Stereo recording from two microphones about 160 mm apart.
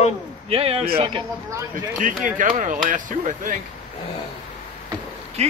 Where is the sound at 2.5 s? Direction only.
50° right (ahead or behind).